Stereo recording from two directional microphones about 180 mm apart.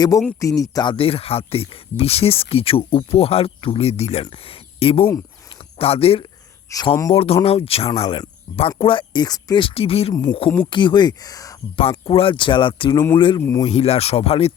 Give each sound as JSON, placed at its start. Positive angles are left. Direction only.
{"t": 0.3, "sound": "speech", "side_deg": 20}
{"t": 5.5, "sound": "a sound", "side_deg": 35}
{"t": 6.7, "sound": "speech", "side_deg": 20}
{"t": 7.1, "sound": "speech", "side_deg": 30}
{"t": 11.8, "sound": "speech", "side_deg": 30}
{"t": 13.7, "sound": "speech", "side_deg": 35}